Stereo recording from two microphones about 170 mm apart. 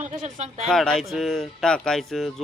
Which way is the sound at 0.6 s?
Centre (ahead or behind).